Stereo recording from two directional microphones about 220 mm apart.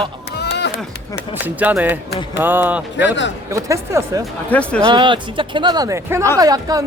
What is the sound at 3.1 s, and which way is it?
Speech, 55° left (ahead or behind).